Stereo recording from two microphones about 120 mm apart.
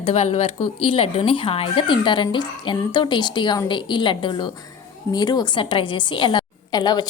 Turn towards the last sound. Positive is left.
turn(degrees=35)  # may be behind; listen again after turning